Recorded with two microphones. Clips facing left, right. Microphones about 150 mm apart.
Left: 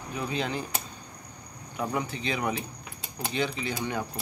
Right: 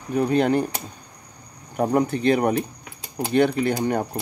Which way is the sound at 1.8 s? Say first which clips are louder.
Right 11 dB; 45° right (ahead or behind).